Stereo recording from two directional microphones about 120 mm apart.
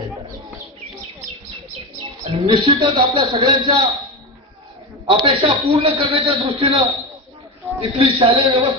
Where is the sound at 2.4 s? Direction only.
40° right (ahead or behind).